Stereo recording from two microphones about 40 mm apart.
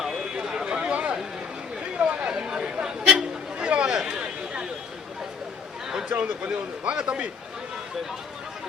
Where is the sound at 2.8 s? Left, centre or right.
Centre.